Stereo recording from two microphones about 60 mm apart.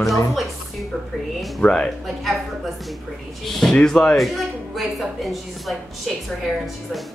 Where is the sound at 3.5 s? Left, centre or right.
Centre.